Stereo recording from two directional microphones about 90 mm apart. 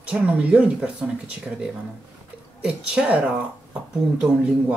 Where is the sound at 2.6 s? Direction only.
15° right (ahead or behind).